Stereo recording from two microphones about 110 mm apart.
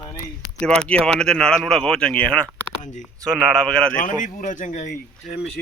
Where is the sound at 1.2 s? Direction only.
5° left (ahead or behind).